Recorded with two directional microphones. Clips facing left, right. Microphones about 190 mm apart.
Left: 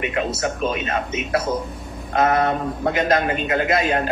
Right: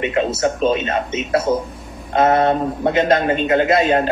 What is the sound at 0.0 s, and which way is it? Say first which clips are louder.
A man's voice: right 5 dB; 30° right (ahead or behind).